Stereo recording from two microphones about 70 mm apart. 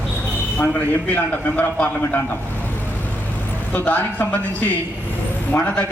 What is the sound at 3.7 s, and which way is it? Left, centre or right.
Speech, left.